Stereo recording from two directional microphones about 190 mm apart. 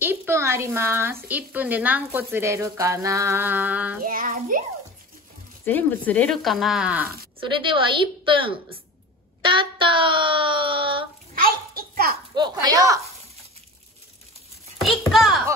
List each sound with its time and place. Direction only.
0.0 s a woman's voice: 10° right (ahead or behind)
4.0 s child singing: 50° right (ahead or behind)
5.7 s speech: 10° left (ahead or behind); by 7.1 s 5° right (ahead or behind)
7.3 s speech: 25° right (ahead or behind)
11.7 s a sound: 50° right (ahead or behind)
12.4 s speech: 20° right (ahead or behind)
14.8 s a child's voice: centre (ahead or behind)